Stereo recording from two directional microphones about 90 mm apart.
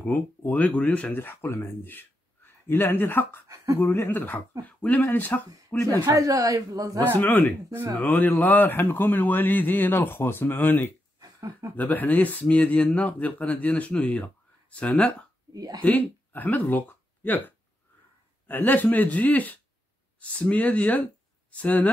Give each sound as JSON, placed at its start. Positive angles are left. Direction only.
{"t": 0.0, "sound": "a man's voice", "side_deg": 20}
{"t": 3.4, "sound": "a sound", "side_deg": -35}
{"t": 3.8, "sound": "a man's voice", "side_deg": 25}
{"t": 6.0, "sound": "speech", "side_deg": -40}
{"t": 7.2, "sound": "a man's voice", "side_deg": 20}
{"t": 11.1, "sound": "a sound", "side_deg": -45}
{"t": 11.7, "sound": "speech", "side_deg": 20}
{"t": 15.5, "sound": "speech", "side_deg": -45}
{"t": 15.8, "sound": "a man's voice", "side_deg": 20}